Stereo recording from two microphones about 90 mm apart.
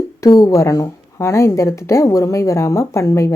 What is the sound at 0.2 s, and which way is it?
A woman's voice, 40° left (ahead or behind).